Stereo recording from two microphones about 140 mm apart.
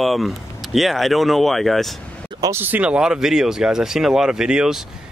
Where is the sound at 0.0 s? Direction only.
Centre (ahead or behind).